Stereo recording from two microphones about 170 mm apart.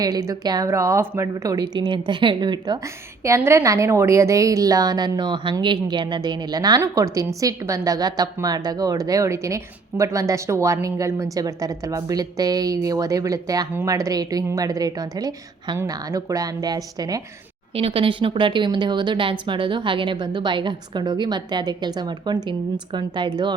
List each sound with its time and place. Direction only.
0.0 s speech: 20° right (ahead or behind)
17.7 s speech: 30° right (ahead or behind)